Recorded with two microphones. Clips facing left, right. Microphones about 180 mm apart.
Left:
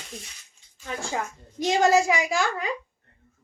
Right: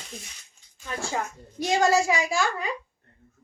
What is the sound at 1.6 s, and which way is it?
Speech, 20° left (ahead or behind).